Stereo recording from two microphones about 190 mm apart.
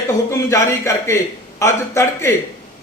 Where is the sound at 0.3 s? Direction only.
15° left (ahead or behind).